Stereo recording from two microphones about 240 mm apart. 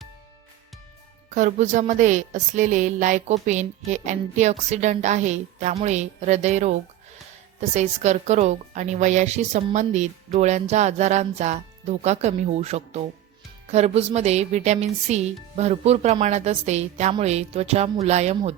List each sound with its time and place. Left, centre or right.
1.3 s speech: right
7.8 s speech: right